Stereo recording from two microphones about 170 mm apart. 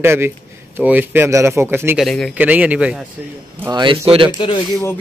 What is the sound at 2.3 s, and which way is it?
Speech, 10° right (ahead or behind).